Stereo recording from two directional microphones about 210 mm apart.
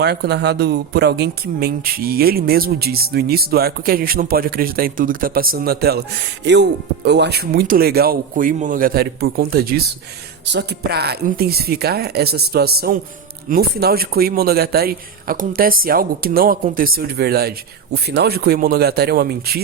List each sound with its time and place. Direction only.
0.0 s speech: 50° right (ahead or behind)